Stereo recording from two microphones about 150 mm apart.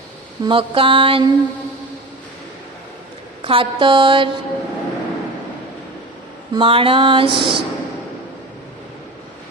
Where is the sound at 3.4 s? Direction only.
35° right (ahead or behind).